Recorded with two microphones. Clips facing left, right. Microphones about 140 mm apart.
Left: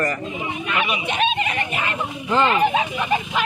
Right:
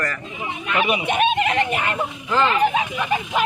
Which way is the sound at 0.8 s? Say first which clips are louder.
Right 4 dB; 45° right (ahead or behind).